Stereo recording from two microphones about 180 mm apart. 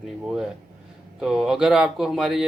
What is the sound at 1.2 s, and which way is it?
Speech, 5° right (ahead or behind).